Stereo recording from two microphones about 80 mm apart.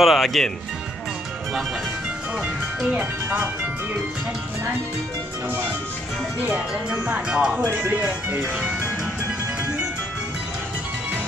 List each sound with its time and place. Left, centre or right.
0.0 s speech: centre
2.9 s speech: right
6.4 s speech: centre